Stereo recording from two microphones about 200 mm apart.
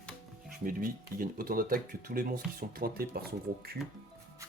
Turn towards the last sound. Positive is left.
turn(degrees=-50)  # may be behind; listen again after turning